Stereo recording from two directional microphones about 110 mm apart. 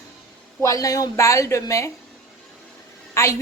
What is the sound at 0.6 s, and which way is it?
Speech, 30° left (ahead or behind).